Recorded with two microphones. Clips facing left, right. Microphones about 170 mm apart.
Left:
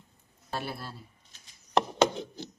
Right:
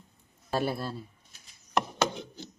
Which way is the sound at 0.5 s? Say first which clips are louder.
Right 7 dB; 45° right (ahead or behind).